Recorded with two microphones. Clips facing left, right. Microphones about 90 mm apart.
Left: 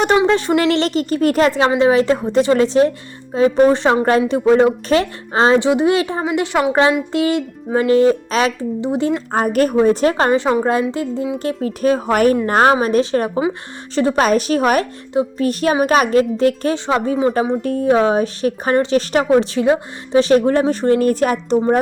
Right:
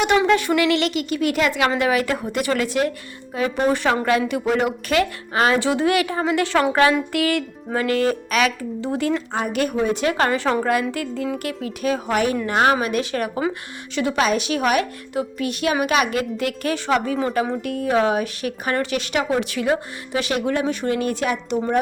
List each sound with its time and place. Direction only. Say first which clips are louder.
0.2 s a woman's voice: left 3 dB; 30° left (ahead or behind)
9.3 s speech: left 7 dB; 45° left (ahead or behind); by 11.3 s 25° left (ahead or behind)
11.3 s a woman's voice: left 7 dB; 35° left (ahead or behind)